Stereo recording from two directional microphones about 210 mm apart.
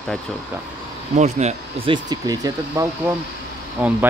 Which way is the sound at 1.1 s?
30° right (ahead or behind).